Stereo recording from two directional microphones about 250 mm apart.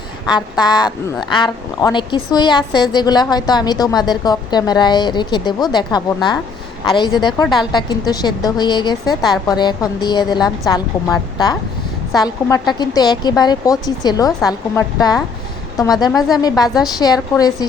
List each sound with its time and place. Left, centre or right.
0.6 s a woman's voice: centre